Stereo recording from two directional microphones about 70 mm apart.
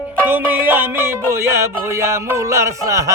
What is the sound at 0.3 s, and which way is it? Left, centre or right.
Music, right.